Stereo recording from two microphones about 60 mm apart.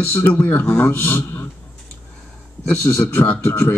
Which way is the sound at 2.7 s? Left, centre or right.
Centre.